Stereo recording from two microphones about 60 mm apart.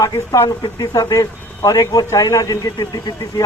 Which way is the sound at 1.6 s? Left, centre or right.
Left.